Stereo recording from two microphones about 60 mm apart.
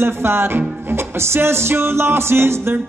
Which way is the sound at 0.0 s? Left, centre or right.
Right.